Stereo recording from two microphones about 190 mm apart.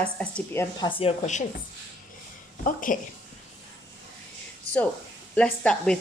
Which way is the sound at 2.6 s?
45° left (ahead or behind).